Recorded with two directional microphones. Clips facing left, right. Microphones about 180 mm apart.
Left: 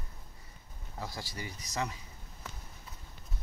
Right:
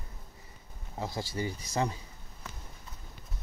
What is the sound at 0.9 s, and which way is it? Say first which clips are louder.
Speech: right 6 dB; 25° right (ahead or behind).